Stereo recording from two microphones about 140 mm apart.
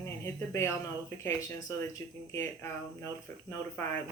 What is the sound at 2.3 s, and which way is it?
Speech, 20° left (ahead or behind).